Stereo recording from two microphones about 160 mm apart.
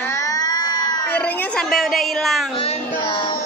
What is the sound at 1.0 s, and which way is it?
A woman's voice, 10° left (ahead or behind).